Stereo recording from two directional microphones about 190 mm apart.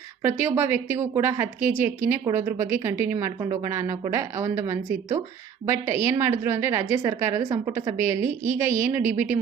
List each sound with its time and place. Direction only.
0.2 s a woman's voice: 10° right (ahead or behind)